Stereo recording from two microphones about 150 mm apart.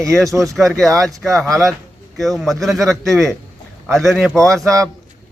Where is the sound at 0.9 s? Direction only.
20° right (ahead or behind).